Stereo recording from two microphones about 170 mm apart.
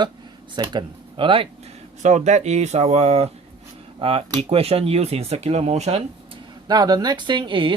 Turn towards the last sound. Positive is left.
turn(degrees=-30)  # may be behind; listen again after turning